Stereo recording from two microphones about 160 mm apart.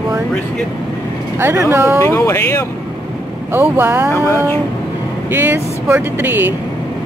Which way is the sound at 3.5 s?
15° right (ahead or behind).